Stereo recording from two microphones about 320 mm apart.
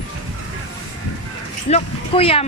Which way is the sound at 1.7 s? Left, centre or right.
Centre.